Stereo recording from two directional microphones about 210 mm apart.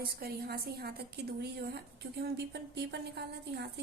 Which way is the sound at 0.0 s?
45° right (ahead or behind).